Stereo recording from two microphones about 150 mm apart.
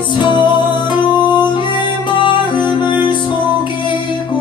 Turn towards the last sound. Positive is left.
turn(degrees=30)  # may be behind; listen again after turning